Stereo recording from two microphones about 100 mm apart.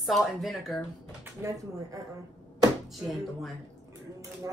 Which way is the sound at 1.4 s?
25° right (ahead or behind).